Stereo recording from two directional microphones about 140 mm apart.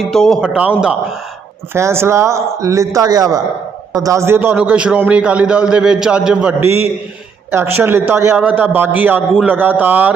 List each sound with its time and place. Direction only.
0.0 s a man's voice: centre (ahead or behind)
1.7 s a man's voice: 20° right (ahead or behind)